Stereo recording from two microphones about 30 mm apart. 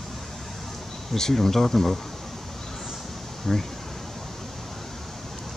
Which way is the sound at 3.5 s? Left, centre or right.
Centre.